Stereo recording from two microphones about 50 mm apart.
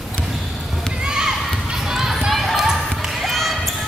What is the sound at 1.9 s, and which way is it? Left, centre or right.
Basketball bounce, centre.